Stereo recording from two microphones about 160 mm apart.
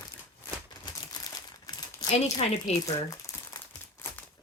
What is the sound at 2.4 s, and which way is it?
Speech, 40° left (ahead or behind).